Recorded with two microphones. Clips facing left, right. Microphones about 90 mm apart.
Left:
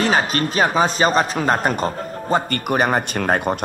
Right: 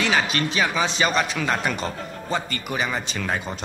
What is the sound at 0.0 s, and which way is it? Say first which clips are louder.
A man's voice: left 4 dB; 40° left (ahead or behind).